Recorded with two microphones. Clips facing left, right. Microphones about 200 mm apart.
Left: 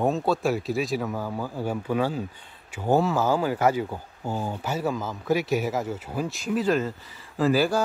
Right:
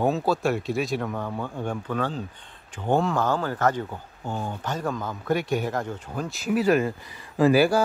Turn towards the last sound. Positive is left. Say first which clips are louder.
# right 3 dB
turn(degrees=-10)  # may be behind; listen again after turning